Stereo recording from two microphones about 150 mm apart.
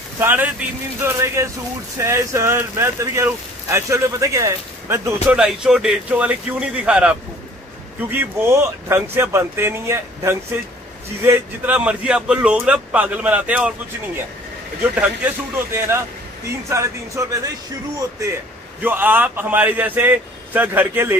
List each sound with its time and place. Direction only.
0.2 s speech: 10° right (ahead or behind)
5.3 s speech: 5° right (ahead or behind); by 17.5 s 20° right (ahead or behind)
18.8 s speech: 10° right (ahead or behind)